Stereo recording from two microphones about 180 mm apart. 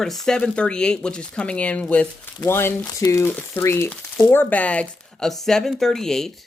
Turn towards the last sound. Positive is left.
turn(degrees=5)  # may be behind; listen again after turning